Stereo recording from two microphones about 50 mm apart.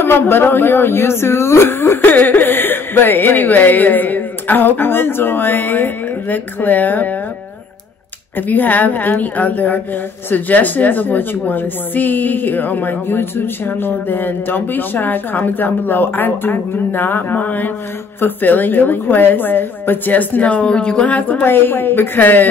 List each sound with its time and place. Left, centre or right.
0.0 s speech: left
2.0 s a woman's voice: left
8.4 s a woman's voice: left
21.5 s speech: left